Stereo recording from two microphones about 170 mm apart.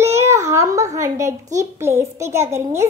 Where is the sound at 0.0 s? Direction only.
15° right (ahead or behind).